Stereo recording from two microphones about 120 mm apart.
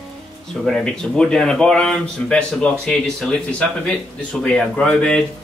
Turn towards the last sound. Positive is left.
turn(degrees=5)  # may be behind; listen again after turning